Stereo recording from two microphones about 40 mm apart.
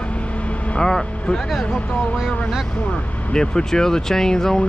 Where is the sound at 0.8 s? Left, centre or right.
Centre.